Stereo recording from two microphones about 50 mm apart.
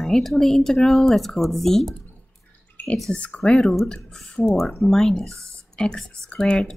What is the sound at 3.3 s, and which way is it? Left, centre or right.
A woman's voice, centre.